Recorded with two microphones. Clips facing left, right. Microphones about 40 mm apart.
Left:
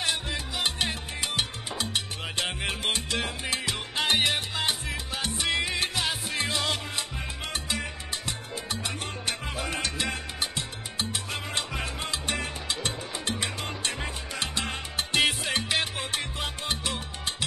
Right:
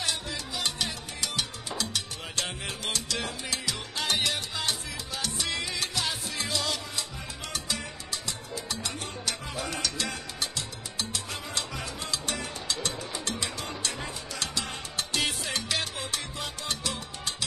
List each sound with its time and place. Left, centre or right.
0.0 s salsa music: left
6.3 s music: left
7.5 s salsa music: left
15.0 s music: left
16.1 s salsa music: left